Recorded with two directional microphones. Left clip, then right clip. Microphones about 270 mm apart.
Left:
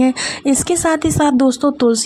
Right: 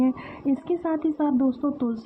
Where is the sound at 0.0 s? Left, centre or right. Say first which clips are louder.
Left 10 dB; left.